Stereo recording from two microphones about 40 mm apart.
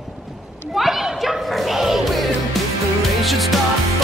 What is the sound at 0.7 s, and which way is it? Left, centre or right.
Music, centre.